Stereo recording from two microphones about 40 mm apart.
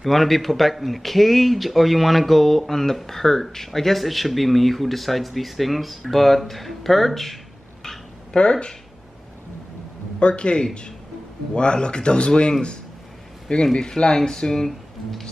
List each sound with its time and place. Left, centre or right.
0.0 s speech: centre
8.3 s speech: left
10.1 s speech: left
13.7 s speech: left